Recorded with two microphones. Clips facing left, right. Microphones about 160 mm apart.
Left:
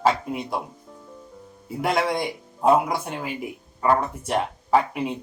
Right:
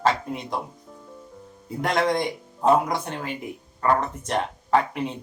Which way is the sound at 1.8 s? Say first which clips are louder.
Even; 5° left (ahead or behind).